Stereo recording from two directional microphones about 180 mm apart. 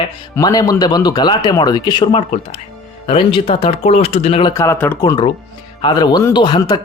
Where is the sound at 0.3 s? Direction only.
20° left (ahead or behind).